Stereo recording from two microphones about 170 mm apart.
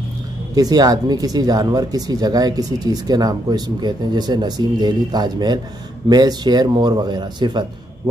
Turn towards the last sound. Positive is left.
turn(degrees=-25)  # may be behind; listen again after turning